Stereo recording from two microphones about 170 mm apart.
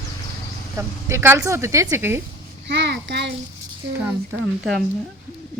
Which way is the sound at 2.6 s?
80° right.